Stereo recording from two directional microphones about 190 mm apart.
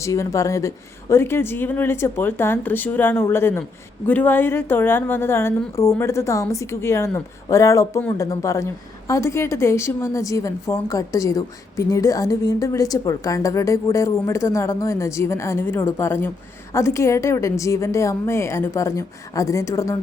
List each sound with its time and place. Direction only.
0.0 s a woman's voice: 15° left (ahead or behind)